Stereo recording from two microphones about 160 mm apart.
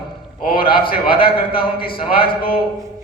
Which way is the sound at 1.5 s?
35° left (ahead or behind).